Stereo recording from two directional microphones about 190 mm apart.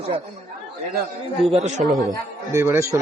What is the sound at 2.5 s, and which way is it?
Speech, 15° right (ahead or behind).